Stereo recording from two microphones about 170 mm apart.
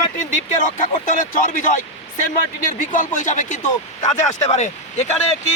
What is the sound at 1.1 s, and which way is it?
Speech, 50° left (ahead or behind).